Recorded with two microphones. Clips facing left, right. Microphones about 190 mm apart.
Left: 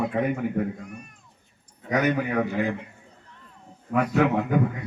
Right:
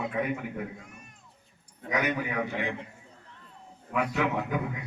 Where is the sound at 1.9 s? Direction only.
45° left (ahead or behind).